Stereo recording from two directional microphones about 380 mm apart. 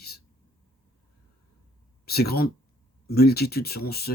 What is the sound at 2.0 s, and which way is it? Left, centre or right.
Speech, left.